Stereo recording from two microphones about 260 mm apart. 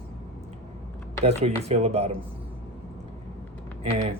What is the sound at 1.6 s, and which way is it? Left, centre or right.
Speech, right.